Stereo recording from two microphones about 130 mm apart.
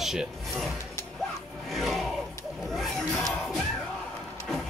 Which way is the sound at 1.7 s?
Centre (ahead or behind).